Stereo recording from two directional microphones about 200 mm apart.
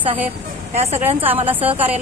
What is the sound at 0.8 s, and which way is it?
Speech, 30° right (ahead or behind).